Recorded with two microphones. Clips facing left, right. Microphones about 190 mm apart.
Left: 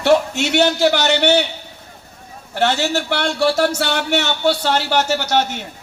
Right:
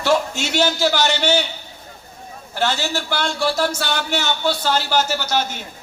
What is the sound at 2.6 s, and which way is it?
A man's voice, 65° left (ahead or behind).